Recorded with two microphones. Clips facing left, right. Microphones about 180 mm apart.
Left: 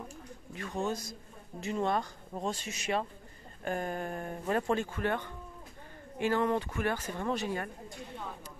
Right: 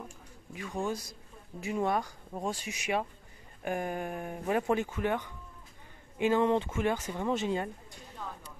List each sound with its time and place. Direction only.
0.5 s speech: 10° right (ahead or behind)